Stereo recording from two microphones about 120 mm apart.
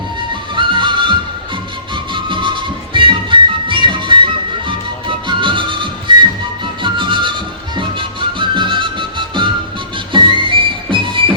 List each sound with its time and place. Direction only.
0.5 s music: 45° right (ahead or behind)
2.1 s music: 45° right (ahead or behind)